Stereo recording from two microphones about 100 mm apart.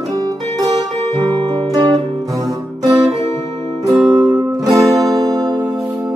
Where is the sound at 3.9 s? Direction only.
10° right (ahead or behind).